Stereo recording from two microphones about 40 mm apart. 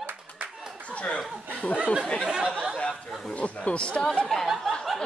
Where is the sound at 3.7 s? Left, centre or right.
Left.